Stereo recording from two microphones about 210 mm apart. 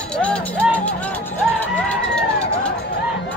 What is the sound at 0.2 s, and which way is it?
Music, 5° left (ahead or behind).